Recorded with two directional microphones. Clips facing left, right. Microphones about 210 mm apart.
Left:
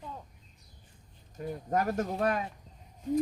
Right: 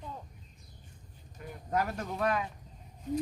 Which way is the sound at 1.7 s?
45° left (ahead or behind).